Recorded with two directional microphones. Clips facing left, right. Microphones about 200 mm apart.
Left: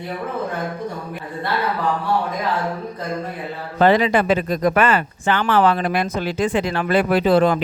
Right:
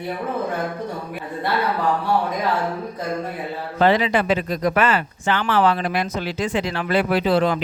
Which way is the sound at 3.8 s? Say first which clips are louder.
Left 2 dB; 45° left (ahead or behind).